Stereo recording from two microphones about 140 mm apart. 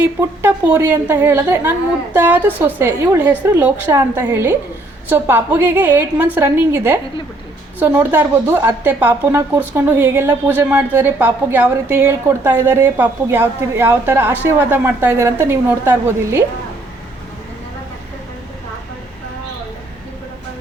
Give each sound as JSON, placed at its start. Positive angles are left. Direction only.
{"t": 0.2, "sound": "a woman's voice", "side_deg": -20}